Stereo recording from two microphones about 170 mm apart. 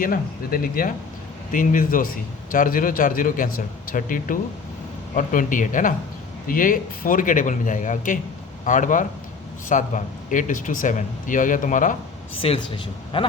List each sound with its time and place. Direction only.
0.0 s a man's voice: 60° left (ahead or behind)
12.4 s speech: 30° left (ahead or behind)